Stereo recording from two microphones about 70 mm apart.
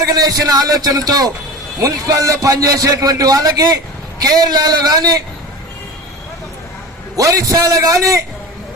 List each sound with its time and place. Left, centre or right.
0.0 s a man's voice: right
7.2 s a man's voice: right